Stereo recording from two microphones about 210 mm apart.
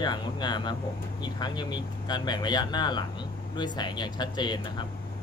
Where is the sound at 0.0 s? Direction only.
20° left (ahead or behind).